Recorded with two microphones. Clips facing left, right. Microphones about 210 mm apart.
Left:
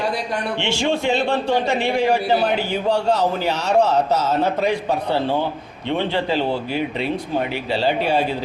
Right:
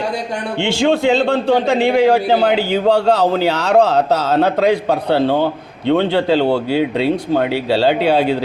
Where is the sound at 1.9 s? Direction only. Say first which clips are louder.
Right 5 dB; 60° right (ahead or behind).